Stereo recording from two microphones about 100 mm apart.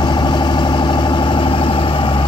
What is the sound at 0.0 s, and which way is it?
Vehicle, 45° left (ahead or behind).